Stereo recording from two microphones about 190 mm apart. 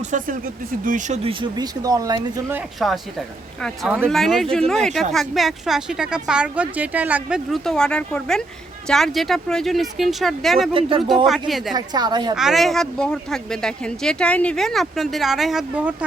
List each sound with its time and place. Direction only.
0.1 s speech: 40° right (ahead or behind); by 2.6 s 15° right (ahead or behind)
2.7 s speech: centre (ahead or behind)
10.8 s speech: 25° right (ahead or behind)
11.3 s speech: centre (ahead or behind)
11.7 s speech: 20° right (ahead or behind)
12.4 s speech: centre (ahead or behind)